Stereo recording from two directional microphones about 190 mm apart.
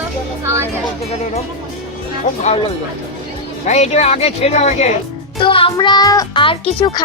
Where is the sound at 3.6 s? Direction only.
35° left (ahead or behind).